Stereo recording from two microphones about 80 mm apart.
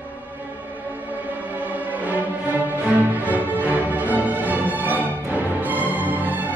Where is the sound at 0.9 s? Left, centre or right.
Centre.